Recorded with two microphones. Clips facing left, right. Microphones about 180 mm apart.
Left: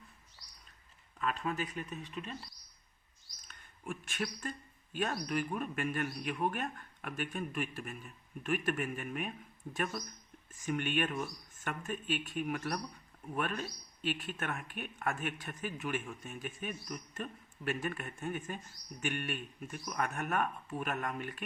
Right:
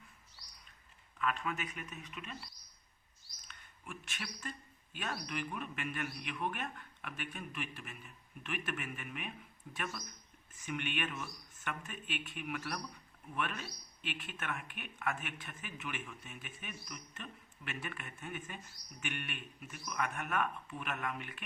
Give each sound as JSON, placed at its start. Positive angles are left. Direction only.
{"t": 1.2, "sound": "speech", "side_deg": 35}
{"t": 3.4, "sound": "speech", "side_deg": 45}